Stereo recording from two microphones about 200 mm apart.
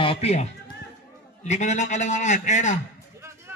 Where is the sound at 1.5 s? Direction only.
35° left (ahead or behind).